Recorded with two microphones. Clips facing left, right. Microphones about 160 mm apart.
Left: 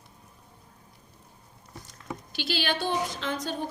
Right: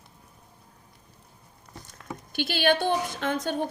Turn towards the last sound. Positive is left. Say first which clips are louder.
# right 4 dB
turn(degrees=-55)  # may be behind; listen again after turning